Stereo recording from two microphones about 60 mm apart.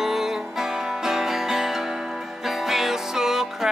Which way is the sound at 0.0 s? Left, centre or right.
Centre.